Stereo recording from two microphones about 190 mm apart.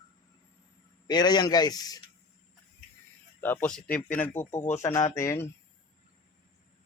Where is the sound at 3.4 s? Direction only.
10° left (ahead or behind).